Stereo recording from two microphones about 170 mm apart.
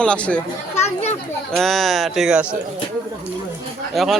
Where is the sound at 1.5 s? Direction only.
Centre (ahead or behind).